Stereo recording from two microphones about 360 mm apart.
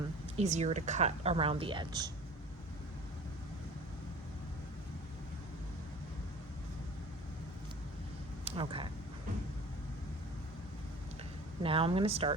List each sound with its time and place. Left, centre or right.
0.3 s speech: centre
8.4 s speech: centre
11.6 s speech: centre